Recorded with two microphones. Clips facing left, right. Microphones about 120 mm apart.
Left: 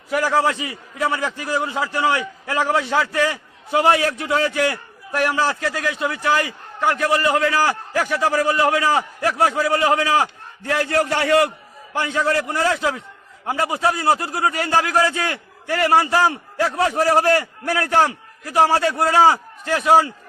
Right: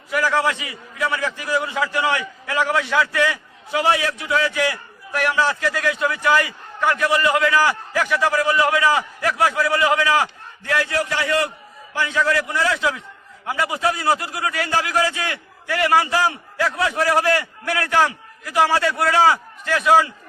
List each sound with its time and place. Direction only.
0.1 s a man's voice: 40° left (ahead or behind)
3.8 s a man's voice: 50° left (ahead or behind); by 8.4 s 25° left (ahead or behind)
9.0 s a man's voice: 40° left (ahead or behind)
10.7 s a man's voice: 45° left (ahead or behind); by 20.1 s 30° left (ahead or behind)